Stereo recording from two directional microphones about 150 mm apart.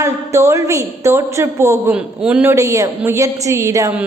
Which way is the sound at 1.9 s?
5° right (ahead or behind).